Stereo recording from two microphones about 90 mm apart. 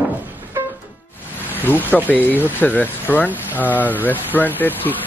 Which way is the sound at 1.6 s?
20° left (ahead or behind).